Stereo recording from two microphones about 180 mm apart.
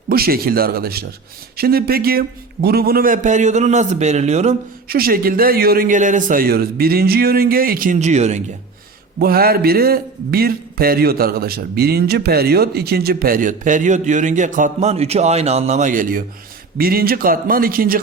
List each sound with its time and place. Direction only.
0.1 s a man's voice: 55° right (ahead or behind); by 4.5 s 40° right (ahead or behind)
4.9 s a man's voice: 55° right (ahead or behind); by 8.4 s 40° right (ahead or behind)
9.1 s a man's voice: 55° right (ahead or behind)